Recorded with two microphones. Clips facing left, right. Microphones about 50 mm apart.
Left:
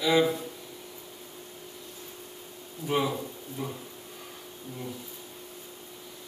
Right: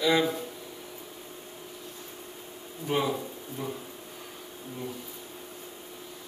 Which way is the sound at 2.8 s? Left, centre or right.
Right.